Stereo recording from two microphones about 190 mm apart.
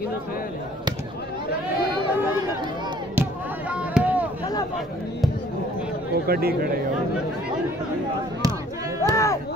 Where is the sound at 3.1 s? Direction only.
5° right (ahead or behind).